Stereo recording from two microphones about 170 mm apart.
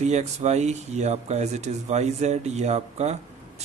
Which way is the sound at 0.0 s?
40° right (ahead or behind).